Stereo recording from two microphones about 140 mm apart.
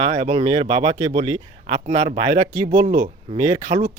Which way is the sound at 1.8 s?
55° right (ahead or behind).